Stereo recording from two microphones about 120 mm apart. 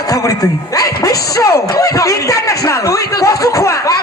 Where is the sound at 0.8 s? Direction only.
30° left (ahead or behind).